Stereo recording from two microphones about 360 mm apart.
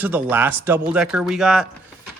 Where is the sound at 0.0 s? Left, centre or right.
Centre.